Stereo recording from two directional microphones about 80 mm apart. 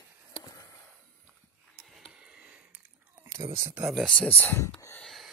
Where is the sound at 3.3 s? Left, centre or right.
Right.